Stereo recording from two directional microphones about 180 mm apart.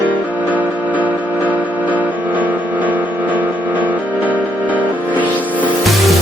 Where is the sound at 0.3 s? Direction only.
10° right (ahead or behind).